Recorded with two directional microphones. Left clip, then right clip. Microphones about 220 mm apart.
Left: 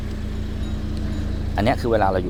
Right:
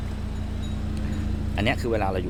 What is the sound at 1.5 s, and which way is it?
Speech, 10° left (ahead or behind).